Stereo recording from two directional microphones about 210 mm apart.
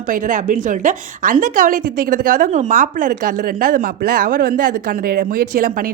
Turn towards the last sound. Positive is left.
turn(degrees=-45)  # may be behind; listen again after turning